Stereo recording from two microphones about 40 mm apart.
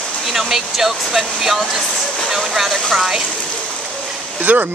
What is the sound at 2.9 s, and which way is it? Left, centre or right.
Speech, centre.